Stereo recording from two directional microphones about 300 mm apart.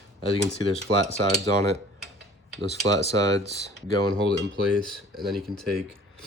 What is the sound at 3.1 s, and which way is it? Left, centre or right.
Speech, centre.